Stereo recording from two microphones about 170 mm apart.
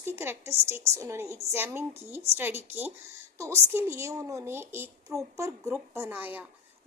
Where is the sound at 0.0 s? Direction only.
15° right (ahead or behind).